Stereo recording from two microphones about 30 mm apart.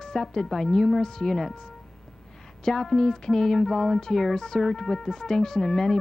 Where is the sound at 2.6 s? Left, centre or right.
Centre.